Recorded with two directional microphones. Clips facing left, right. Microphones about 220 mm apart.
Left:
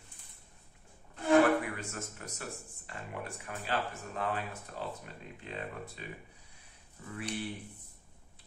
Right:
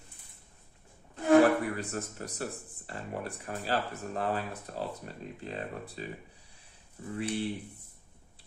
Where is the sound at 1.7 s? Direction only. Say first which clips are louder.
Right 6 dB; 35° right (ahead or behind).